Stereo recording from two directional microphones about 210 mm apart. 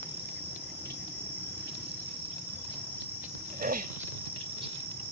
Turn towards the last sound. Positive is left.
turn(degrees=-40)  # may be behind; listen again after turning